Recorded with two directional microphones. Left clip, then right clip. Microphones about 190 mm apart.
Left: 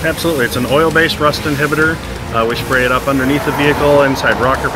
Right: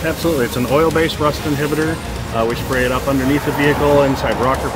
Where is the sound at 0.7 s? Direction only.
10° right (ahead or behind).